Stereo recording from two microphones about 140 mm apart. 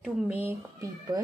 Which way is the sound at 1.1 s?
25° right (ahead or behind).